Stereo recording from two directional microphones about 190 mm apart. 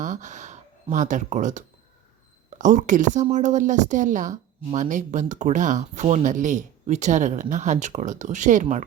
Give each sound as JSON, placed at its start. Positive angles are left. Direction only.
{"t": 0.0, "sound": "a woman's voice", "side_deg": -40}